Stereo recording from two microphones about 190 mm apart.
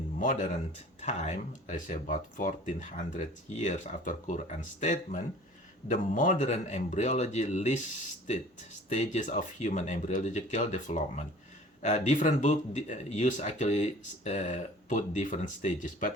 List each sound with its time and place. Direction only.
0.2 s speech: 40° left (ahead or behind)
8.9 s speech: 40° left (ahead or behind)